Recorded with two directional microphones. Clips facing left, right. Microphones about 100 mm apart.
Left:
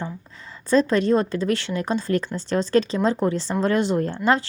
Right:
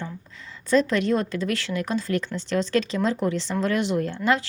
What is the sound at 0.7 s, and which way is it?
Speech, 35° left (ahead or behind).